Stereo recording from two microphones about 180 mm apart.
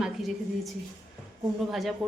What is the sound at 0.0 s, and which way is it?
Speech, centre (ahead or behind).